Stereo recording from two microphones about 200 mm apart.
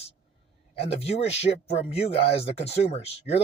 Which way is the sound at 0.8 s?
30° left (ahead or behind).